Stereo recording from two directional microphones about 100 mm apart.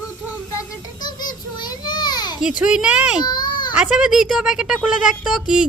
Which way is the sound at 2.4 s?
10° right (ahead or behind).